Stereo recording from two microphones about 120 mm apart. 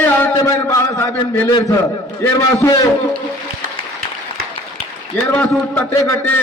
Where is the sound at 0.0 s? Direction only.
15° left (ahead or behind).